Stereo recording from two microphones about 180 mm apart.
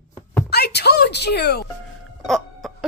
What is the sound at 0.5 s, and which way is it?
Music, 65° left (ahead or behind).